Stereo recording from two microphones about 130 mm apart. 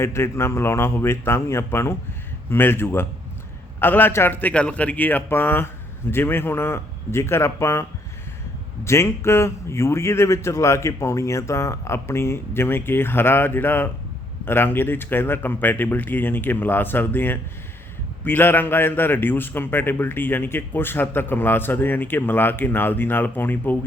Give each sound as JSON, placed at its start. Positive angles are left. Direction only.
{"t": 0.0, "sound": "a man's voice", "side_deg": 20}